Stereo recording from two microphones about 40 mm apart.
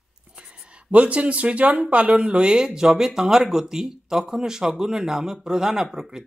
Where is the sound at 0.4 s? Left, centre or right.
Right.